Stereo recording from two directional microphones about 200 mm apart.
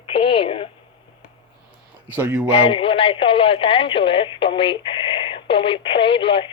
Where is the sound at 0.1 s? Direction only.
25° left (ahead or behind).